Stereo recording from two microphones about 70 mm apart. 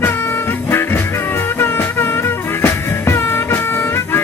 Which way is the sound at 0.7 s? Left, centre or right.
Left.